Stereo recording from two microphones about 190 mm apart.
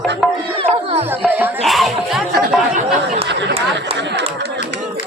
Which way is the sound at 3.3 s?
65° right (ahead or behind).